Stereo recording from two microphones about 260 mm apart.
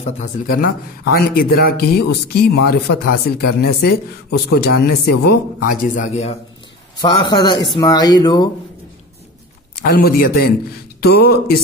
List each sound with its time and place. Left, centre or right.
0.0 s speech: left
7.0 s speech: centre
9.9 s speech: left